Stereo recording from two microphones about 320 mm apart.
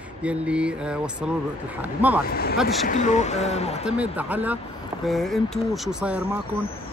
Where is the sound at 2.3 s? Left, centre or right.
Left.